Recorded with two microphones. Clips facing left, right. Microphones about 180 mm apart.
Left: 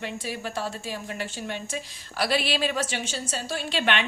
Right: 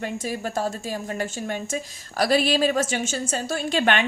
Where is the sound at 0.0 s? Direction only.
45° right (ahead or behind).